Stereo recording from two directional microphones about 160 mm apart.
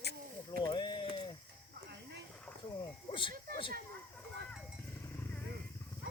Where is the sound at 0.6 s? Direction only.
25° left (ahead or behind).